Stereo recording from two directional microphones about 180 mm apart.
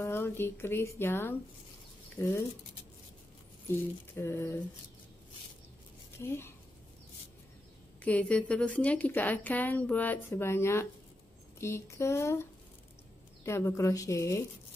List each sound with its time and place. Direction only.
0.0 s a woman's voice: 15° left (ahead or behind)
4.1 s a woman's voice: 15° left (ahead or behind)
6.1 s speech: 15° left (ahead or behind)
8.0 s a woman's voice: 5° left (ahead or behind)
13.5 s a woman's voice: 15° left (ahead or behind)